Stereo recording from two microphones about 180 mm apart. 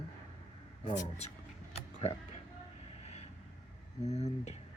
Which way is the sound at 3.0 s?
35° left (ahead or behind).